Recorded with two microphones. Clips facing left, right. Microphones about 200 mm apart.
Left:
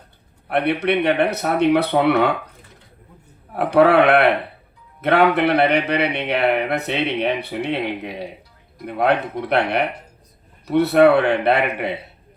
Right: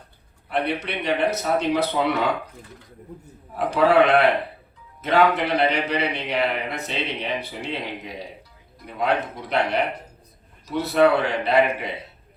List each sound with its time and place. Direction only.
0.4 s a man's voice: 60° left (ahead or behind)
3.5 s a man's voice: 60° left (ahead or behind)